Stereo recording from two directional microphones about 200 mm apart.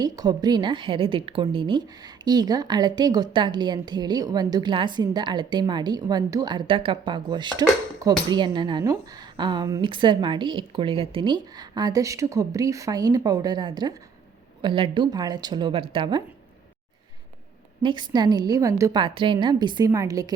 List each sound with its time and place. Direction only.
0.0 s a woman's voice: 20° right (ahead or behind)
17.8 s a woman's voice: 20° right (ahead or behind)